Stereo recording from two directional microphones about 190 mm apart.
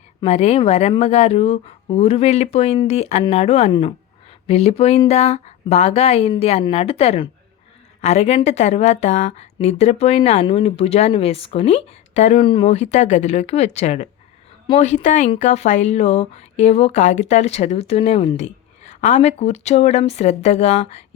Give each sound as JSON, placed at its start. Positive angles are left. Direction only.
{"t": 0.2, "sound": "speech", "side_deg": 35}